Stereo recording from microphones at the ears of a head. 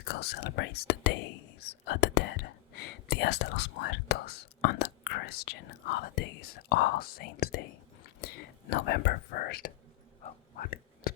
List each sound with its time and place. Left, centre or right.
0.0 s speech: left
10.2 s whispering: left